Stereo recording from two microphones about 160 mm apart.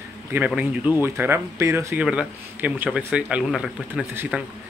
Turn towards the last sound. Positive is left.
turn(degrees=-10)  # may be behind; listen again after turning